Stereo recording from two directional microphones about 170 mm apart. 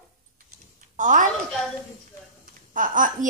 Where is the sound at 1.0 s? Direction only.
50° right (ahead or behind).